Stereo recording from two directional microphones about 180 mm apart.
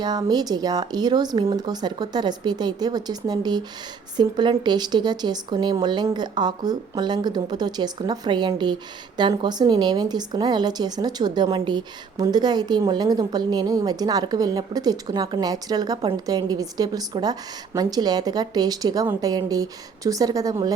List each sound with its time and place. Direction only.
0.0 s speech: 20° right (ahead or behind)